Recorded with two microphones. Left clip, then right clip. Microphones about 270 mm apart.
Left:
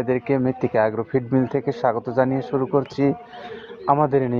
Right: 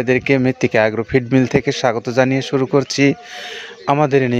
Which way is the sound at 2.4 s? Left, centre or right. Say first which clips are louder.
Right 5 dB; right.